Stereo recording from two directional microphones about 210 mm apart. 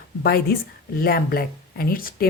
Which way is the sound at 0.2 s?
50° left (ahead or behind).